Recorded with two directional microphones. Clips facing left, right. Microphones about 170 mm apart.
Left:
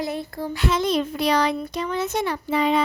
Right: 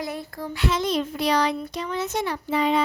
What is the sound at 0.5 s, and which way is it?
A child's voice, 50° left (ahead or behind).